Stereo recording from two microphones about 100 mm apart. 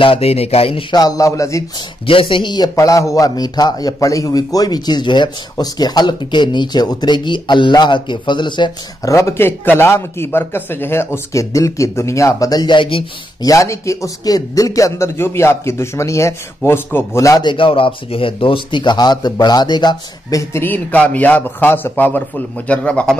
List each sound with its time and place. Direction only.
0.0 s speech: 75° left (ahead or behind)
0.9 s a man's voice: 35° left (ahead or behind)
2.0 s speech: 65° left (ahead or behind)
9.0 s a man's voice: 30° left (ahead or behind); by 13.0 s 55° left (ahead or behind)
13.4 s a man's voice: 35° left (ahead or behind)
17.4 s speech: 55° left (ahead or behind); by 20.6 s 35° left (ahead or behind)
20.6 s a man's voice: 15° left (ahead or behind)